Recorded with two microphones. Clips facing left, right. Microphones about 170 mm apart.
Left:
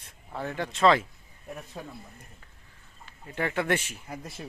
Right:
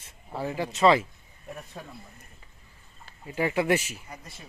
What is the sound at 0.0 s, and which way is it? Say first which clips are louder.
Speech: right 2 dB; 5° right (ahead or behind).